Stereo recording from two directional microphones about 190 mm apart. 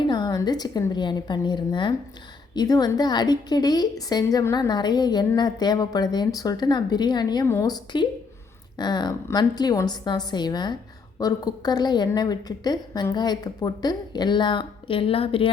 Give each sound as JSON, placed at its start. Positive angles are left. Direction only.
{"t": 0.0, "sound": "a woman's voice", "side_deg": 25}